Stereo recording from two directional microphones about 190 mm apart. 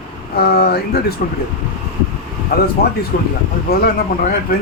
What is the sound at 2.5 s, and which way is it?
Speech, 55° left (ahead or behind).